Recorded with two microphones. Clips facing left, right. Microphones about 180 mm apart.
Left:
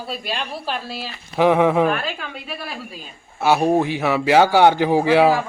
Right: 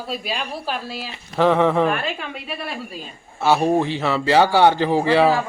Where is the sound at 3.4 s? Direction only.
10° left (ahead or behind).